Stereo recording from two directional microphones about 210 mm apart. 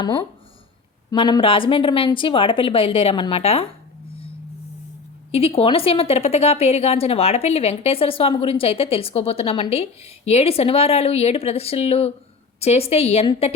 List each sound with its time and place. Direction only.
1.1 s a woman's voice: 25° left (ahead or behind)
5.3 s a woman's voice: 25° left (ahead or behind)